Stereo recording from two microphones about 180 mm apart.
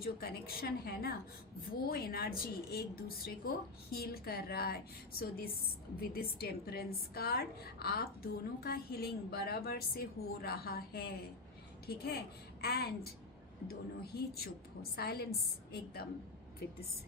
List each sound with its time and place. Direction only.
0.0 s a woman's voice: 60° left (ahead or behind)
6.0 s a woman's voice: 55° left (ahead or behind)